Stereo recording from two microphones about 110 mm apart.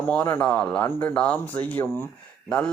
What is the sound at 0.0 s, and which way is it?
Speech, 20° left (ahead or behind).